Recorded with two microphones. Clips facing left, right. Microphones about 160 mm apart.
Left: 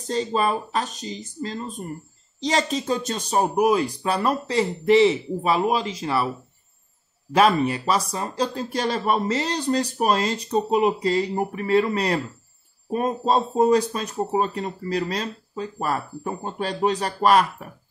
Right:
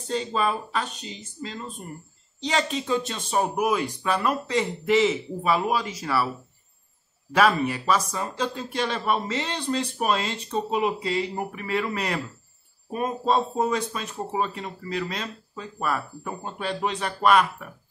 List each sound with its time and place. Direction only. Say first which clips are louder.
0.0 s speech: left 3 dB; 40° left (ahead or behind)
7.3 s speech: left 3 dB; 30° left (ahead or behind)